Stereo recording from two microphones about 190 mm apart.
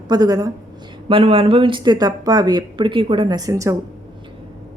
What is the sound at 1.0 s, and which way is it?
A woman's voice, 30° right (ahead or behind).